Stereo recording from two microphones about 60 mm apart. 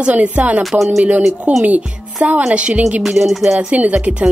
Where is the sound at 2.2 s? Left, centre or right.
Right.